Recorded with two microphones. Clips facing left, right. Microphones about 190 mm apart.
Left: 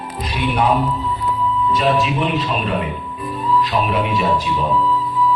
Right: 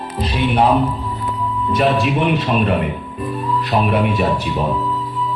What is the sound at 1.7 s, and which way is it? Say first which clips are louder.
A man's voice: right 4 dB; 55° right (ahead or behind).